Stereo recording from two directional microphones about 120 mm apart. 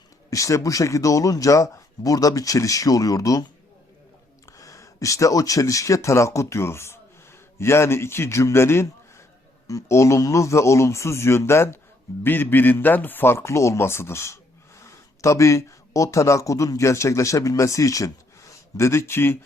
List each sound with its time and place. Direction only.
0.3 s speech: 25° left (ahead or behind)
4.5 s speech: 25° left (ahead or behind)